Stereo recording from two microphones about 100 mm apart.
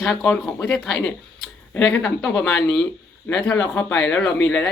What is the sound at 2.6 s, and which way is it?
Speech, 5° left (ahead or behind).